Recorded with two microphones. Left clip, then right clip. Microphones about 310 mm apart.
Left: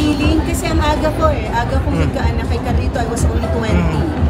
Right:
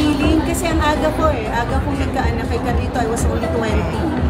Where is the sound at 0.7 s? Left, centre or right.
Centre.